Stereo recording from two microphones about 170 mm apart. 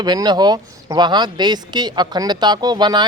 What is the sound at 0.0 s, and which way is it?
Speech, 25° right (ahead or behind).